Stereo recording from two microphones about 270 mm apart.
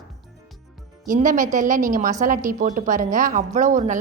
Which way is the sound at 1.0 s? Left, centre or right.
Right.